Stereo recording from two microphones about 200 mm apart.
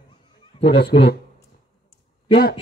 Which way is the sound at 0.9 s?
25° left (ahead or behind).